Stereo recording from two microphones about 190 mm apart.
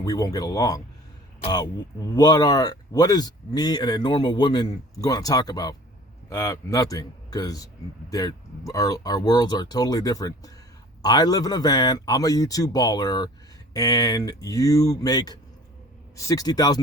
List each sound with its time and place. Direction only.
0.0 s speech: 20° left (ahead or behind)